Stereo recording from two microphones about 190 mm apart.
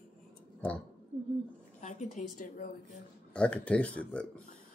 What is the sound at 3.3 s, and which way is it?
Speech, 5° left (ahead or behind).